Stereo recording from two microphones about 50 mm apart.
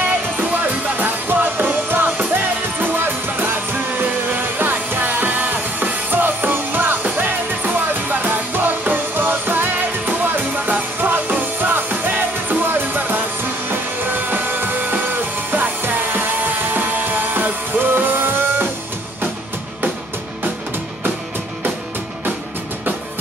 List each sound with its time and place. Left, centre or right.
0.1 s music: right